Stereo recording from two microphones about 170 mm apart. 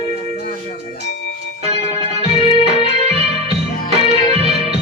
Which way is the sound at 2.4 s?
35° right (ahead or behind).